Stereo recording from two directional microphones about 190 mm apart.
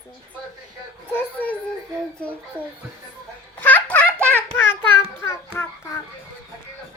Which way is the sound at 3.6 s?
10° left (ahead or behind).